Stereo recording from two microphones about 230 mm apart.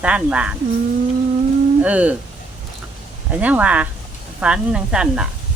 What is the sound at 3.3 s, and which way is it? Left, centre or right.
A woman's voice, centre.